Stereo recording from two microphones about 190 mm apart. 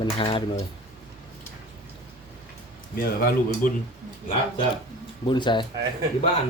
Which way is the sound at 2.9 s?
50° left (ahead or behind).